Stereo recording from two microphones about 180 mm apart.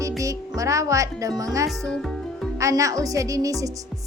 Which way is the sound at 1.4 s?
20° right (ahead or behind).